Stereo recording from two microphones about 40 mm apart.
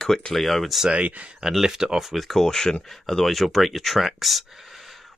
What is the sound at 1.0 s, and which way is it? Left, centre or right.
Speech, right.